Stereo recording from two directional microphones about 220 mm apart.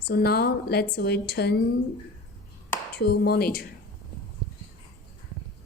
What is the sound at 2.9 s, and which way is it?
Speech, 45° left (ahead or behind).